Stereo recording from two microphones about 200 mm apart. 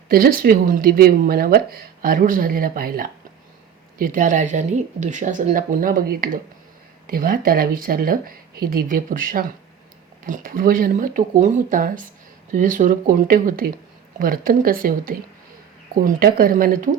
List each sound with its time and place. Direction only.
0.1 s speech: 45° right (ahead or behind)